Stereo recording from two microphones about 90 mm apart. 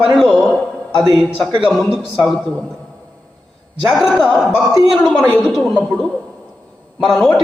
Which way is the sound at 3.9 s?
Centre (ahead or behind).